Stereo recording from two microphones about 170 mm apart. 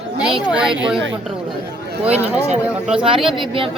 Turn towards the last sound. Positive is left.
turn(degrees=-30)  # may be behind; listen again after turning